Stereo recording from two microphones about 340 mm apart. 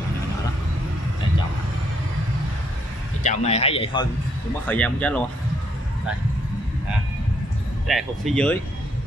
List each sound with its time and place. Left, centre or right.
3.2 s speech: centre
4.6 s speech: centre
7.8 s speech: centre